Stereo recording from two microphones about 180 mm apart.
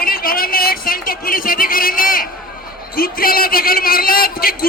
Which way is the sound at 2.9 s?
55° left (ahead or behind).